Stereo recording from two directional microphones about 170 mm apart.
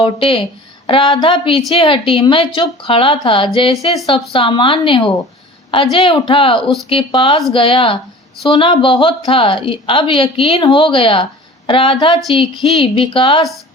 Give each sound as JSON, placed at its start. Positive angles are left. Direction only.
{"t": 0.0, "sound": "speech", "side_deg": 30}